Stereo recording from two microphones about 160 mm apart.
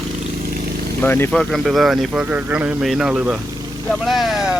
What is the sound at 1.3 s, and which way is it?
Speech, centre (ahead or behind).